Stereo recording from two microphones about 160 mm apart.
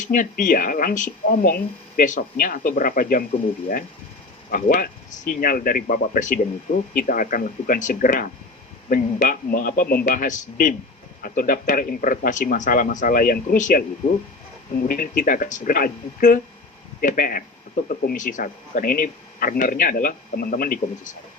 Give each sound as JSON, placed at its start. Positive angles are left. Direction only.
{"t": 0.0, "sound": "speech", "side_deg": 55}
{"t": 4.5, "sound": "speech", "side_deg": 60}
{"t": 14.8, "sound": "speech", "side_deg": 60}